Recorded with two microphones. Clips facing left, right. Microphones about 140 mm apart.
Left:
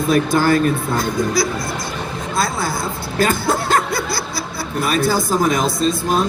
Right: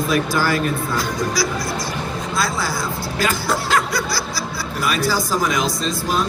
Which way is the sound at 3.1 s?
50° left (ahead or behind).